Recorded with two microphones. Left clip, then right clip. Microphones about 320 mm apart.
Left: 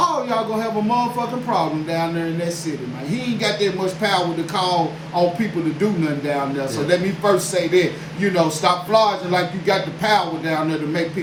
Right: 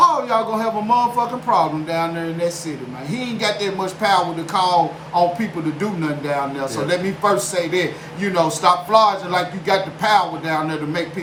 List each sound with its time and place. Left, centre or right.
0.0 s a man's voice: centre
6.8 s a man's voice: centre